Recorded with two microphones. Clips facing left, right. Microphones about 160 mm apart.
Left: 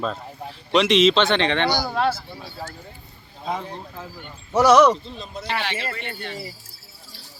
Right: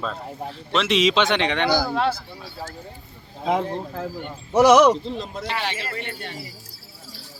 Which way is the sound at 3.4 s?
65° right (ahead or behind).